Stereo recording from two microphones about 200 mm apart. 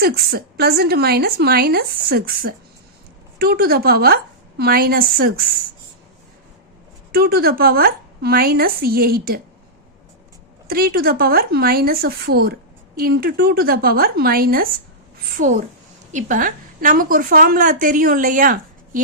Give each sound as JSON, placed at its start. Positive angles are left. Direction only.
{"t": 0.0, "sound": "a woman's voice", "side_deg": -50}
{"t": 7.1, "sound": "a woman's voice", "side_deg": -50}
{"t": 10.7, "sound": "a woman's voice", "side_deg": -50}